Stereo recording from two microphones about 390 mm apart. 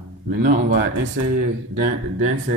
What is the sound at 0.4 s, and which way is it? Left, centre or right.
Speech, centre.